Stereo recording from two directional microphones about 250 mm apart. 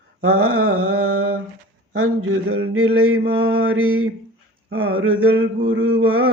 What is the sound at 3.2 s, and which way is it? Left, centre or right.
Mantra, right.